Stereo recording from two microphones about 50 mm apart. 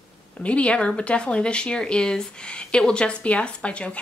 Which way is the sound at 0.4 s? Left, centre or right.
Left.